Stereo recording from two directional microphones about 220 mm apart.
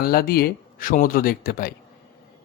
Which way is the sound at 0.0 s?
40° left (ahead or behind).